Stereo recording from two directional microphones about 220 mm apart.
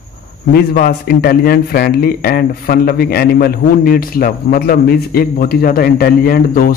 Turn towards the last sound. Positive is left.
turn(degrees=40)  # may be behind; listen again after turning